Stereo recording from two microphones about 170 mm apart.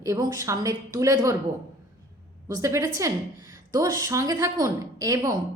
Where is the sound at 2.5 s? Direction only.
20° right (ahead or behind).